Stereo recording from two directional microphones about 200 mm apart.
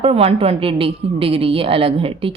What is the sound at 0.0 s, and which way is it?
A woman's voice, 30° right (ahead or behind).